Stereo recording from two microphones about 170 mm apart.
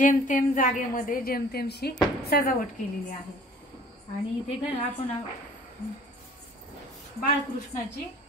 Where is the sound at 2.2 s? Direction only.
60° left (ahead or behind).